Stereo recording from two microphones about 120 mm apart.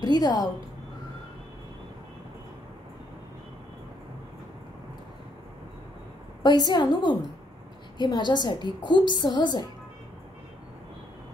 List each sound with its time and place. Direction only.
0.0 s a woman's voice: 35° left (ahead or behind)
6.4 s a woman's voice: 35° left (ahead or behind)